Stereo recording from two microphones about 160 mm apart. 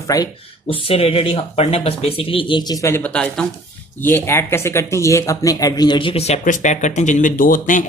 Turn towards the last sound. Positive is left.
turn(degrees=55)  # may be behind; listen again after turning